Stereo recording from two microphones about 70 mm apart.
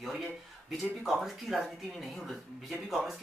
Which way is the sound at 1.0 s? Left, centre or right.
Centre.